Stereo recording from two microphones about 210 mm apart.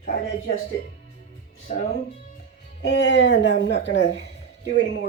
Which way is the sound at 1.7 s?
35° left (ahead or behind).